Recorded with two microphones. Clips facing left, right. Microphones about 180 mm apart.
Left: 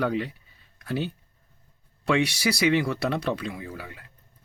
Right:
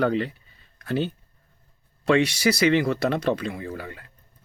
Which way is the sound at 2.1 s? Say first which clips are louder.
Right 4 dB; 60° right (ahead or behind).